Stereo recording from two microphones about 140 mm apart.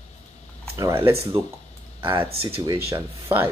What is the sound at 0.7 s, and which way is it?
Speech, 20° right (ahead or behind).